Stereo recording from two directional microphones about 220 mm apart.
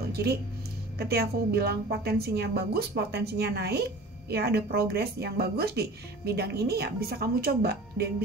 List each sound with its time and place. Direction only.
0.1 s speech: 45° right (ahead or behind)